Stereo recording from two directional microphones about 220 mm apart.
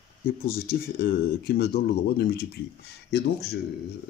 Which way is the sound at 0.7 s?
45° left (ahead or behind).